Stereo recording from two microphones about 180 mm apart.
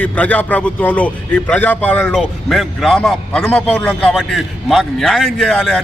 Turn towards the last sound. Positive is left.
turn(degrees=5)  # may be behind; listen again after turning